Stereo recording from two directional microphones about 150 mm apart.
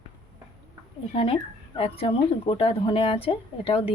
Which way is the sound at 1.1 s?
40° left (ahead or behind).